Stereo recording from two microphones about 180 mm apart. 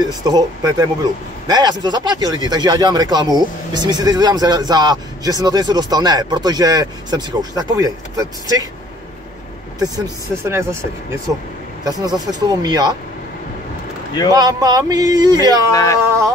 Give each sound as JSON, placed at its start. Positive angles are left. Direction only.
{"t": 0.0, "sound": "speech", "side_deg": -20}
{"t": 9.8, "sound": "speech", "side_deg": -20}
{"t": 14.3, "sound": "speech", "side_deg": -20}
{"t": 15.7, "sound": "speech", "side_deg": 15}